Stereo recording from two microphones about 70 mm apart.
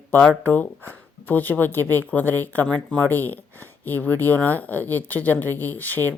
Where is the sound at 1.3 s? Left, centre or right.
Left.